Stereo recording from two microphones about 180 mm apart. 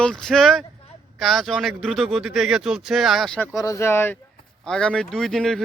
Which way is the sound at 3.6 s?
15° left (ahead or behind).